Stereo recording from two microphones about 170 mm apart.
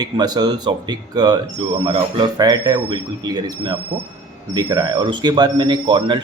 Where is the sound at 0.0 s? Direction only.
25° right (ahead or behind).